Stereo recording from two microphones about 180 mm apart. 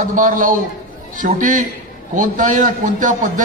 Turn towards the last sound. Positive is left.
turn(degrees=-45)  # may be behind; listen again after turning